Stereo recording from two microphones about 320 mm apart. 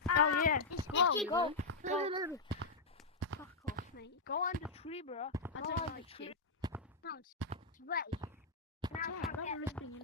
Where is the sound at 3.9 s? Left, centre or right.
Left.